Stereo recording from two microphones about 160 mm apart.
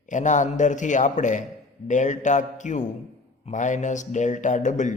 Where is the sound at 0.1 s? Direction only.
50° left (ahead or behind).